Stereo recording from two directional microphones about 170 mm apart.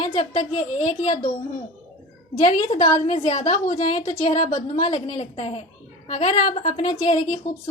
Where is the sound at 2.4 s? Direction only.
25° left (ahead or behind).